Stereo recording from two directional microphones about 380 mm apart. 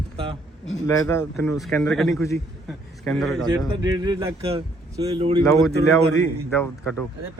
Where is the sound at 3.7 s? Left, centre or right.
Centre.